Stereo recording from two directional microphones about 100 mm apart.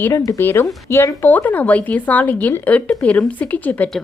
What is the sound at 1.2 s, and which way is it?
Speech, 15° left (ahead or behind).